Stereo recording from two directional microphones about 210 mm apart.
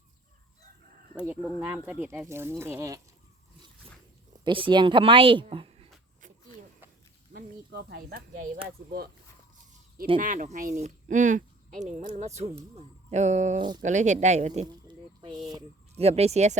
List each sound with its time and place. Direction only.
1.1 s speech: 5° right (ahead or behind)
4.4 s speech: 25° right (ahead or behind)
7.3 s speech: 50° right (ahead or behind)
10.2 s speech: 35° right (ahead or behind)
14.8 s a sound: 20° right (ahead or behind)